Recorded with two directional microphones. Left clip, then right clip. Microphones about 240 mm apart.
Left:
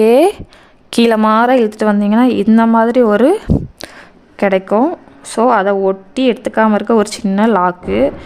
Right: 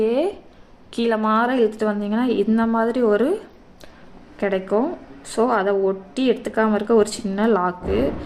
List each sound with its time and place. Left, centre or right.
0.0 s a woman's voice: left